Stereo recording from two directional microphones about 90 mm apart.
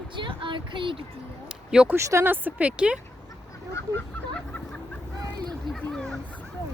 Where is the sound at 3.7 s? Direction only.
30° left (ahead or behind).